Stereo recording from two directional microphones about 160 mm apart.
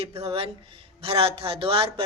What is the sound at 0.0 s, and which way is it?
Speech, 40° right (ahead or behind).